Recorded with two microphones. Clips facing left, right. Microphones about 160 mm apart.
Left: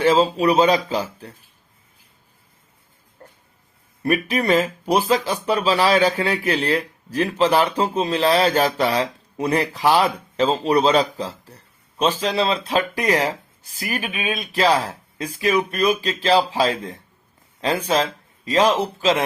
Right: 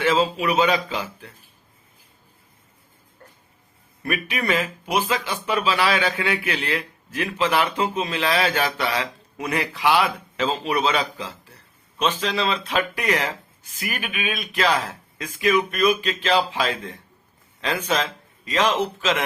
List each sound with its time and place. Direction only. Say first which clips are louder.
0.0 s speech: left 4 dB; 35° left (ahead or behind)
3.2 s music: left 4 dB; 35° left (ahead or behind)
4.0 s speech: left 6 dB; 35° left (ahead or behind)